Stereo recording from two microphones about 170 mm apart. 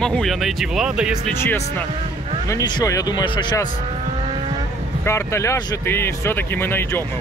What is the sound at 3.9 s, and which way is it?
Vehicle, 40° right (ahead or behind).